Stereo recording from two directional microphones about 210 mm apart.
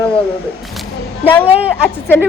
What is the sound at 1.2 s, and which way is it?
Speech, 30° left (ahead or behind).